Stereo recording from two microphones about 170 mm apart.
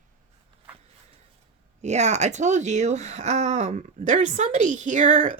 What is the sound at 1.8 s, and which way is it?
Speech, 40° right (ahead or behind).